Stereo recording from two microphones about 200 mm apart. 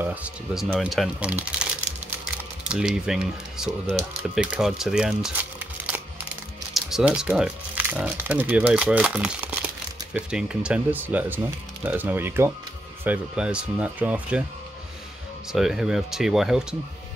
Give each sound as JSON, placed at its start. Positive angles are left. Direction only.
{"t": 0.0, "sound": "speech", "side_deg": -10}
{"t": 6.7, "sound": "speech", "side_deg": 0}
{"t": 15.5, "sound": "speech", "side_deg": 0}